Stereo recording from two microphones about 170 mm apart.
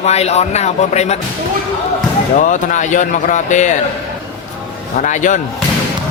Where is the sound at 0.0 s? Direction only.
40° left (ahead or behind).